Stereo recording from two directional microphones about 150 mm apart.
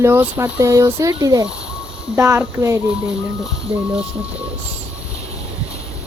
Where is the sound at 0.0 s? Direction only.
15° right (ahead or behind).